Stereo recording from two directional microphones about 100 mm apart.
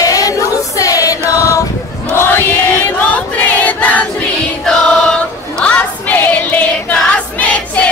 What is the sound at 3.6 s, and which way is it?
Choir, 15° left (ahead or behind).